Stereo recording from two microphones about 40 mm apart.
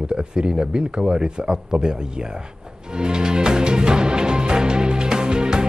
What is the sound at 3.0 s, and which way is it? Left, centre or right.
Music, right.